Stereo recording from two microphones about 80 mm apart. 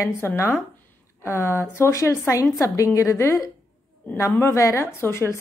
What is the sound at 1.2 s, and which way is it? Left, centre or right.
A woman's voice, left.